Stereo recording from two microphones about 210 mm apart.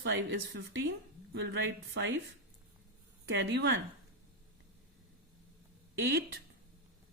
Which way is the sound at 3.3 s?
55° right (ahead or behind).